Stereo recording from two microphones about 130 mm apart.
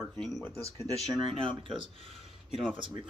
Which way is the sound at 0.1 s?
5° left (ahead or behind).